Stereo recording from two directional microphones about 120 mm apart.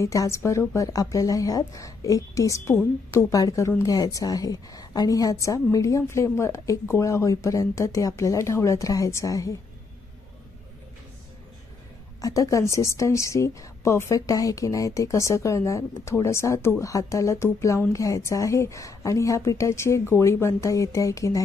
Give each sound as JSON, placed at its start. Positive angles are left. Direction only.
{"t": 0.0, "sound": "a woman's voice", "side_deg": 25}
{"t": 12.2, "sound": "a woman's voice", "side_deg": 30}